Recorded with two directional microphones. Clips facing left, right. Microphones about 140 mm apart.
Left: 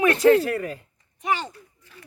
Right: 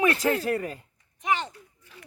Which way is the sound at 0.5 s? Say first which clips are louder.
Left 1 dB; 35° right (ahead or behind).